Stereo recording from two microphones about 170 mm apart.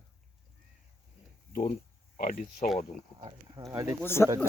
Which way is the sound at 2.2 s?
50° left (ahead or behind).